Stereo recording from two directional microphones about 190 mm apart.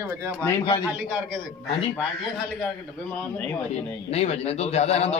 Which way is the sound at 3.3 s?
10° left (ahead or behind).